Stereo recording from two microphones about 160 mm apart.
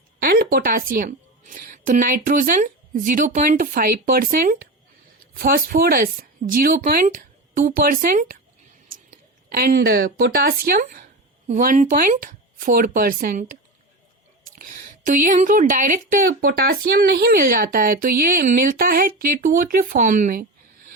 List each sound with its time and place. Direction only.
0.2 s a woman's voice: 65° right (ahead or behind)
14.6 s speech: 60° right (ahead or behind)